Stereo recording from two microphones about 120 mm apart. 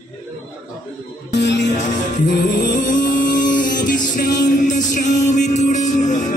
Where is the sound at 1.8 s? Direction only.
90° left.